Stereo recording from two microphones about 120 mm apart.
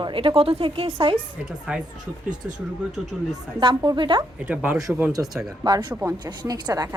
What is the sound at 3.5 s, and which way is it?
Speech, 35° right (ahead or behind).